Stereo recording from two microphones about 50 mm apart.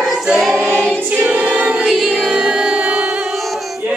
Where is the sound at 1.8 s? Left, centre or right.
Centre.